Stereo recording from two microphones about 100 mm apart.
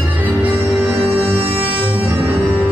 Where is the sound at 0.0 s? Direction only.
15° right (ahead or behind).